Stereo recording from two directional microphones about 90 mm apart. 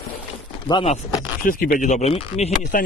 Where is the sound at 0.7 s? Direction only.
60° left (ahead or behind).